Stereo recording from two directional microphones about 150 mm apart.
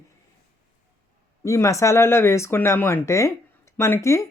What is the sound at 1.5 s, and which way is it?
Speech, 20° left (ahead or behind).